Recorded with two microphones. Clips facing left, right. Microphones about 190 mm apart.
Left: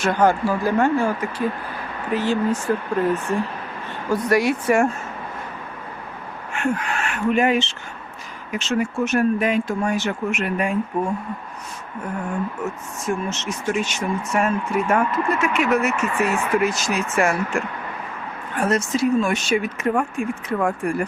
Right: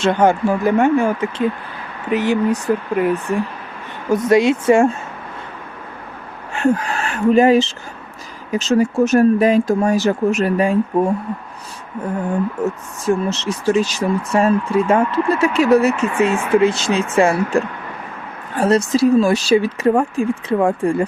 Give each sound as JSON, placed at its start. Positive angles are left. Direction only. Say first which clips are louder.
{"t": 0.0, "sound": "speech", "louder": "right 4 dB", "side_deg": -25}
{"t": 6.5, "sound": "speech", "louder": "right 6 dB", "side_deg": -35}
{"t": 13.1, "sound": "speech", "louder": "right 7 dB", "side_deg": -35}